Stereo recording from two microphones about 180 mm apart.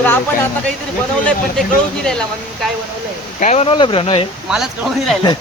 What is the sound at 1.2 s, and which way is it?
Speech, 5° left (ahead or behind).